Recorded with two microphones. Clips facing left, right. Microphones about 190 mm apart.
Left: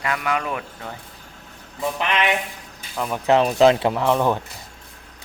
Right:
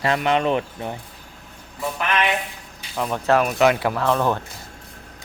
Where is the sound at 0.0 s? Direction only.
25° right (ahead or behind).